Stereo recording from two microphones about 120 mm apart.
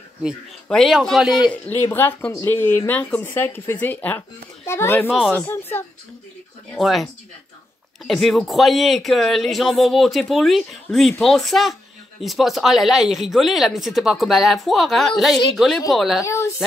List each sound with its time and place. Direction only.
0.7 s speech: centre (ahead or behind)
1.5 s speech: 15° left (ahead or behind)
6.7 s speech: centre (ahead or behind)